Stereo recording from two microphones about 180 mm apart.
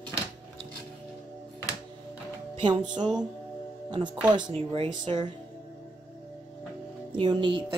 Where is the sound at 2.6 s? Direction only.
25° right (ahead or behind).